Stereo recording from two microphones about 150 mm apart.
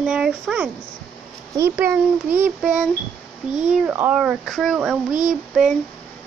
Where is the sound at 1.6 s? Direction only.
15° right (ahead or behind).